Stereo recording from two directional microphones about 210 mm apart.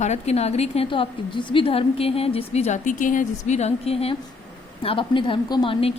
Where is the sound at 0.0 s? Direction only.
30° left (ahead or behind).